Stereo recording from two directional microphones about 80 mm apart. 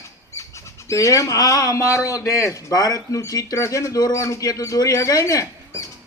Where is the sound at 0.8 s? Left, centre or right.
Left.